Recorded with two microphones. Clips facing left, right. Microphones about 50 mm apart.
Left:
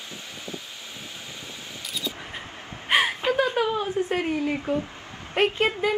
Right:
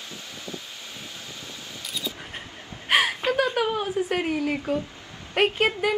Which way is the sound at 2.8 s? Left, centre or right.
Centre.